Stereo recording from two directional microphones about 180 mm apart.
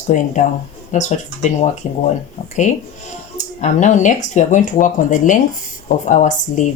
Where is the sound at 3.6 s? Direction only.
40° left (ahead or behind).